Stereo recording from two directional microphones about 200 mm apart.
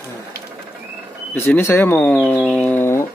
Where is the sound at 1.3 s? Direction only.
10° left (ahead or behind).